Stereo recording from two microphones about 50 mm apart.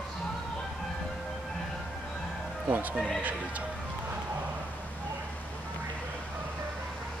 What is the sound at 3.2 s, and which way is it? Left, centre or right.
Speech, right.